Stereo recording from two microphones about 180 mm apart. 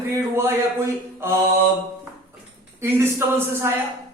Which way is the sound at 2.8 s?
15° right (ahead or behind).